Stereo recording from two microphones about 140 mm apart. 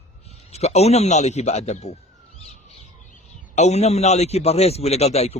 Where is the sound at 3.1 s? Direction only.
55° left (ahead or behind).